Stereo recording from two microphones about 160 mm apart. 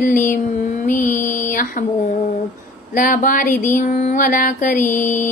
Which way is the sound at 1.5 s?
55° left (ahead or behind).